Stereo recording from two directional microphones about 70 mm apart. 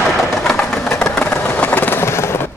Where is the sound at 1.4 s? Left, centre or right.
Left.